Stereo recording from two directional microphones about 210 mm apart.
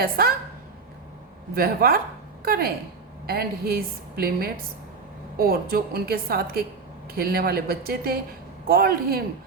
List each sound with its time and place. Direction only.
0.0 s a woman's voice: 45° right (ahead or behind)
1.5 s a woman's voice: 45° right (ahead or behind)